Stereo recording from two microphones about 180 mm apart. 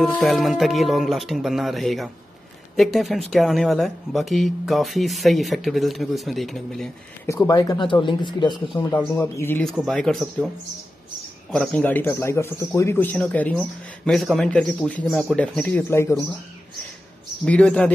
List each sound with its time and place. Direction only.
0.0 s speech: centre (ahead or behind)
7.4 s speech: 20° left (ahead or behind)
8.9 s speech: 10° left (ahead or behind)
11.5 s speech: 5° left (ahead or behind)
15.9 s speech: 15° left (ahead or behind)
17.5 s speech: 5° left (ahead or behind)